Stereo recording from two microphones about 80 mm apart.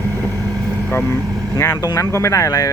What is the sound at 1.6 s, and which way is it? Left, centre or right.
Speech, left.